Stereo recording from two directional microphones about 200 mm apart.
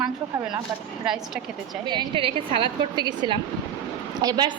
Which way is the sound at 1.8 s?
25° right (ahead or behind).